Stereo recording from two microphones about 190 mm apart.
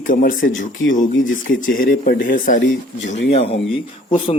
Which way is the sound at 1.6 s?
45° left (ahead or behind).